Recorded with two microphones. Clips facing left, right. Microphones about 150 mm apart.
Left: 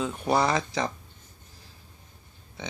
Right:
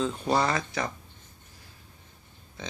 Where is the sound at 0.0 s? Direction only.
15° left (ahead or behind).